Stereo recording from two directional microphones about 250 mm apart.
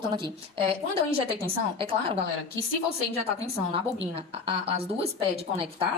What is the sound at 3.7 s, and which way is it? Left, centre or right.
A woman's voice, right.